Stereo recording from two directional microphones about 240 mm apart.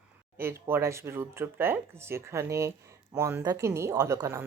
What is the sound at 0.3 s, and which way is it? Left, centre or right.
Speech, centre.